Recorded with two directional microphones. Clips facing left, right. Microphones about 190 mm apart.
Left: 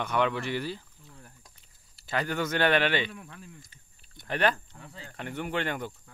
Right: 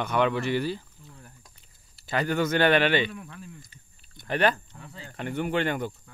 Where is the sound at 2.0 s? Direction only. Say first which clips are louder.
Right 4 dB; 5° right (ahead or behind).